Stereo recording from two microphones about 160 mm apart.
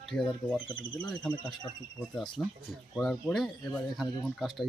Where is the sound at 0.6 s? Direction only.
30° left (ahead or behind).